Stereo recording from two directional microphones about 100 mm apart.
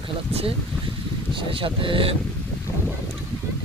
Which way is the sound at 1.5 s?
60° right (ahead or behind).